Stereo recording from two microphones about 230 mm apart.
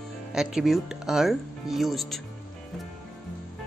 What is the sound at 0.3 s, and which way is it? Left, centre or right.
Speech, centre.